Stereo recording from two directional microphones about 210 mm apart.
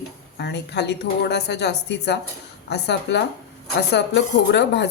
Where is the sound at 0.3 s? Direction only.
55° left (ahead or behind).